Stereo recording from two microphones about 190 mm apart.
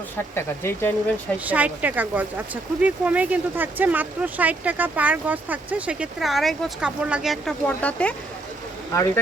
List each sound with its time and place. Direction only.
0.3 s speech: 10° left (ahead or behind)
1.5 s speech: 10° right (ahead or behind); by 9.2 s 15° left (ahead or behind)